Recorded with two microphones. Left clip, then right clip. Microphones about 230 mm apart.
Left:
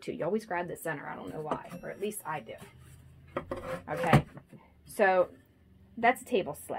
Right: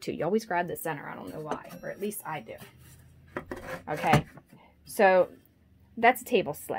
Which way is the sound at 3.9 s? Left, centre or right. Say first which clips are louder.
Right 2 dB; right.